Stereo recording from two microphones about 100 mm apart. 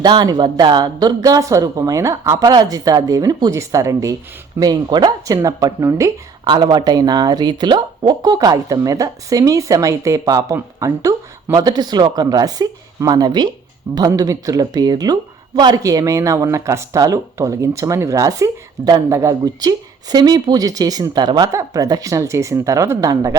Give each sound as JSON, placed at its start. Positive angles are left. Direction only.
{"t": 0.0, "sound": "speech", "side_deg": -45}
{"t": 2.4, "sound": "speech", "side_deg": -40}
{"t": 4.6, "sound": "speech", "side_deg": -45}
{"t": 6.4, "sound": "speech", "side_deg": -50}
{"t": 21.4, "sound": "speech", "side_deg": -35}